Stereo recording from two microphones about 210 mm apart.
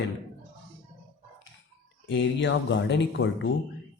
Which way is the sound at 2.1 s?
60° left (ahead or behind).